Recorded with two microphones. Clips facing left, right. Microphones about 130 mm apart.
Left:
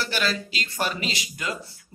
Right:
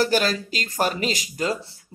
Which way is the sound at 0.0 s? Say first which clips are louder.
Right 6 dB; 40° right (ahead or behind).